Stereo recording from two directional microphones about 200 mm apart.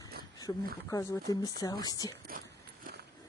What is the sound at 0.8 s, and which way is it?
Speech, 15° left (ahead or behind).